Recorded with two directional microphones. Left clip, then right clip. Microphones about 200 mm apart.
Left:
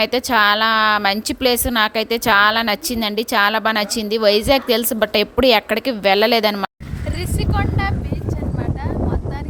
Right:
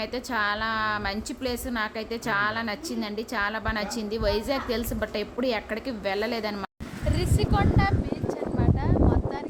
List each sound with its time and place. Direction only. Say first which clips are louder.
0.0 s a woman's voice: left 13 dB; 45° left (ahead or behind)
7.3 s vehicle: left 3 dB; 10° left (ahead or behind)